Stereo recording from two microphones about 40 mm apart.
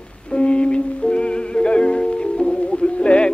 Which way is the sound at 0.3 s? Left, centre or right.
Left.